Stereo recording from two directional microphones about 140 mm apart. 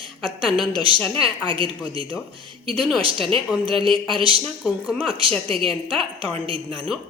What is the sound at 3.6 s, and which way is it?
Speech, 40° right (ahead or behind).